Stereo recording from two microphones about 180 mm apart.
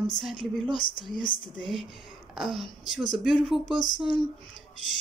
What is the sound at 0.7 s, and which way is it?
Speech, 25° left (ahead or behind).